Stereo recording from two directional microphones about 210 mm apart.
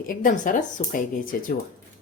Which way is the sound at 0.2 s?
40° left (ahead or behind).